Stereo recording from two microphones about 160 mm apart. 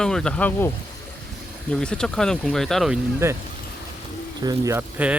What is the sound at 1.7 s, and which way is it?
Speech, 5° left (ahead or behind).